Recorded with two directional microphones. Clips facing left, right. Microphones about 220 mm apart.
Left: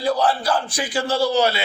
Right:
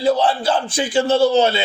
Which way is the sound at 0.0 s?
25° right (ahead or behind).